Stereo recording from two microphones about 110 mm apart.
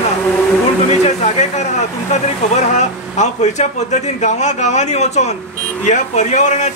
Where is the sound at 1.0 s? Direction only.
85° left.